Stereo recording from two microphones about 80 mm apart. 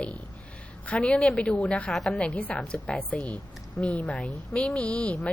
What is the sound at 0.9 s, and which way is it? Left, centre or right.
A woman's voice, centre.